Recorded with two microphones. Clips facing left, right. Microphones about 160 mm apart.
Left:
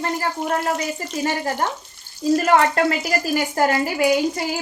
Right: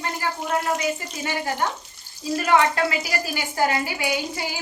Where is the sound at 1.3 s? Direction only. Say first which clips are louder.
Left 2 dB; 40° left (ahead or behind).